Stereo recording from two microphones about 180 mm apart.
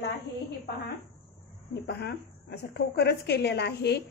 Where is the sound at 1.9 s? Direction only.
65° left (ahead or behind).